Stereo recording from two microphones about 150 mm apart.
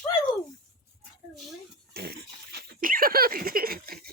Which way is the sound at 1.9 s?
90° right.